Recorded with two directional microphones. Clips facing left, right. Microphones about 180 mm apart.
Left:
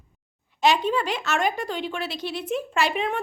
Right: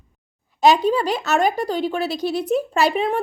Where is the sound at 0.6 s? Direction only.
40° right (ahead or behind).